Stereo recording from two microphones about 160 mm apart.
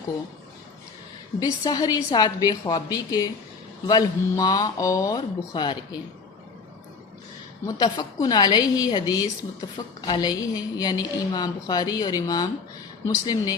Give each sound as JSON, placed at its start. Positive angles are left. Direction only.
{"t": 1.4, "sound": "a woman's voice", "side_deg": 25}
{"t": 7.8, "sound": "a woman's voice", "side_deg": 25}